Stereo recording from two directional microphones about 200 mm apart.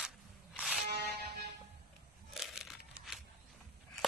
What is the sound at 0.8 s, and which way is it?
Music, 55° right (ahead or behind).